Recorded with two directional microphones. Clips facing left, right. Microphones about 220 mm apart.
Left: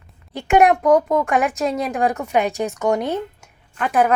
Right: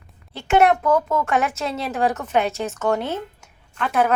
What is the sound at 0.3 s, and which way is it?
A woman's voice, 15° left (ahead or behind).